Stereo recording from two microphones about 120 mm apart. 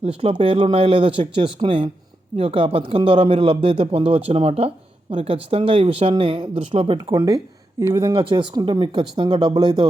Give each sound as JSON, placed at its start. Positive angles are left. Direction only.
{"t": 0.0, "sound": "speech", "side_deg": -55}
{"t": 7.0, "sound": "speech", "side_deg": -30}
{"t": 8.1, "sound": "speech", "side_deg": -45}